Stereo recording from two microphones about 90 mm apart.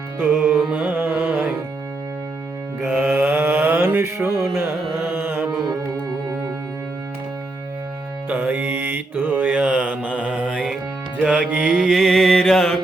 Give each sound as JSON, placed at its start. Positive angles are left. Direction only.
{"t": 0.5, "sound": "carnatic music", "side_deg": -10}
{"t": 2.8, "sound": "mantra", "side_deg": -15}
{"t": 4.4, "sound": "carnatic music", "side_deg": -30}
{"t": 8.3, "sound": "mantra", "side_deg": -15}
{"t": 11.2, "sound": "music", "side_deg": -10}